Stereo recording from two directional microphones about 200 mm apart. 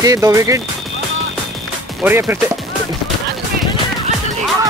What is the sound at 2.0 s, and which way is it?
Speech, 10° right (ahead or behind).